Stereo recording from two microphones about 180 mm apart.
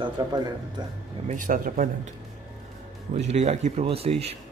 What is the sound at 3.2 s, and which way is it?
Speech, 40° right (ahead or behind).